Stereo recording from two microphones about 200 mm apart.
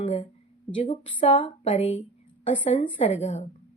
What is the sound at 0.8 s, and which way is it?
Speech, 30° left (ahead or behind).